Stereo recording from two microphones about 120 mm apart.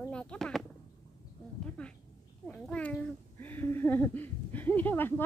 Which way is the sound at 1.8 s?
10° left (ahead or behind).